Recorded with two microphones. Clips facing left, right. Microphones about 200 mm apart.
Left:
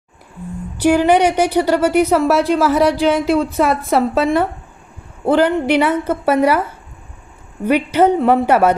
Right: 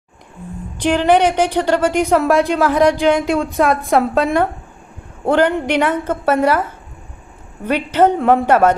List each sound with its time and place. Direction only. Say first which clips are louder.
0.8 s a woman's voice: left 1 dB; 10° left (ahead or behind)